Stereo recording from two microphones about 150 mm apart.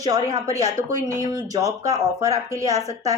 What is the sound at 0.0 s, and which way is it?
Speech, 25° right (ahead or behind).